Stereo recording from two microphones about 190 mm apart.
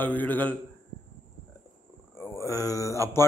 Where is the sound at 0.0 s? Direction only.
10° left (ahead or behind).